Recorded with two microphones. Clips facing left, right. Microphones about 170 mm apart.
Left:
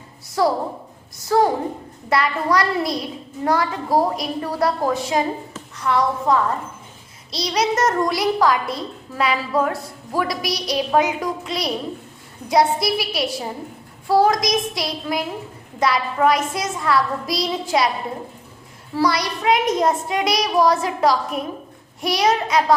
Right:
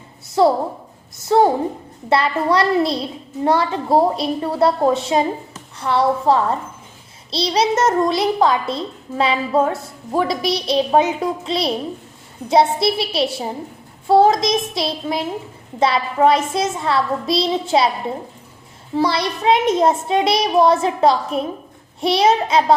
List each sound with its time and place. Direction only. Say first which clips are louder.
0.4 s a child's voice: right 4 dB; 25° right (ahead or behind)
18.9 s a child's voice: right 2 dB; 25° right (ahead or behind)